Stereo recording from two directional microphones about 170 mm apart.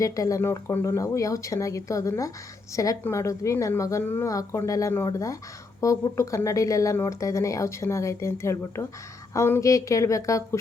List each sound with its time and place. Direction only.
0.0 s speech: 20° left (ahead or behind)